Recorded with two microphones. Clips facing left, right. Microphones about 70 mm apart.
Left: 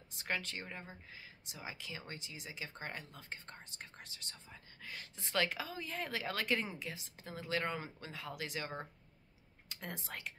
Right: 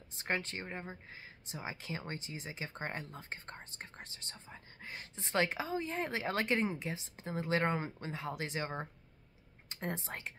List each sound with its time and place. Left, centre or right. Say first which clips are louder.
0.2 s speech: right 3 dB; right